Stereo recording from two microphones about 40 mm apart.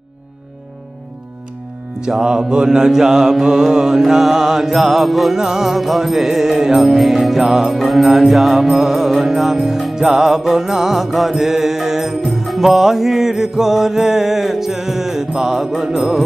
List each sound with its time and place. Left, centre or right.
2.1 s music: centre